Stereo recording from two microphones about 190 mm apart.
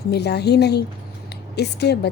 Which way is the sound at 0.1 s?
60° left (ahead or behind).